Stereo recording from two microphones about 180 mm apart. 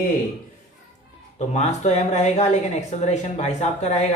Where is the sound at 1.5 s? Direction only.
40° left (ahead or behind).